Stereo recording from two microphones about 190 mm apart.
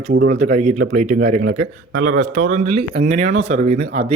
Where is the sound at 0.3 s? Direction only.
40° right (ahead or behind).